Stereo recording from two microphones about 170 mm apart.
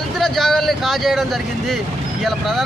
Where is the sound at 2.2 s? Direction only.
Centre (ahead or behind).